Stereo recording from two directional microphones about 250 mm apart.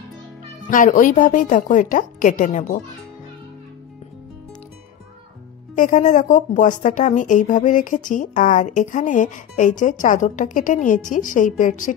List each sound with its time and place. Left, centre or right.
0.7 s a woman's voice: left
5.8 s a woman's voice: left